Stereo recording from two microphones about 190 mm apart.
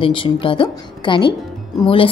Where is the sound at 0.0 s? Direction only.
25° left (ahead or behind).